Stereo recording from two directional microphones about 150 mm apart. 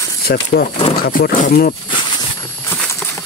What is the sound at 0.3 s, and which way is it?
Speech, 90° left.